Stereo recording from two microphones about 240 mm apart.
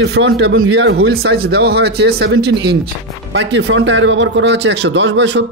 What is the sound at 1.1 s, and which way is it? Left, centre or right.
Speech, right.